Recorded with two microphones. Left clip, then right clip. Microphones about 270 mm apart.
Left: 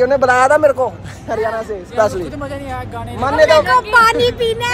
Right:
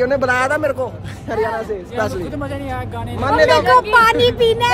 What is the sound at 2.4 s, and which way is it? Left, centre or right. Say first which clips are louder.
Speech: even; centre.